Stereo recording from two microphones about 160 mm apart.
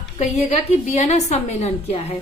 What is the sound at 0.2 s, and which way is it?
A woman's voice, 40° left (ahead or behind).